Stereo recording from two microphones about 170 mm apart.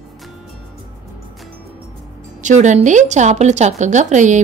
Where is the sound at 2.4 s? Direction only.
45° right (ahead or behind).